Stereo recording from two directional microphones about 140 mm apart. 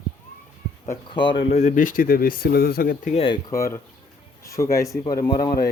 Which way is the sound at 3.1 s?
40° left (ahead or behind).